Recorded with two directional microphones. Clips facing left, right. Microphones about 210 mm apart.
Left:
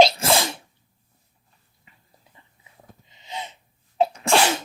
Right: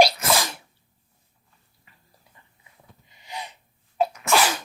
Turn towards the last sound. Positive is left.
turn(degrees=25)  # may be behind; listen again after turning